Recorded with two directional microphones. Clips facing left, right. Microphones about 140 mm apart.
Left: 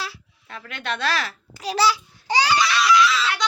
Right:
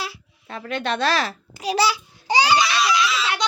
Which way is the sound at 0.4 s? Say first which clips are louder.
Right 5 dB; 30° right (ahead or behind).